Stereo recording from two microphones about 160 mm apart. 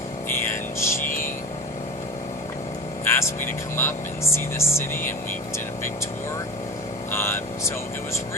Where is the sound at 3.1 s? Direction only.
15° left (ahead or behind).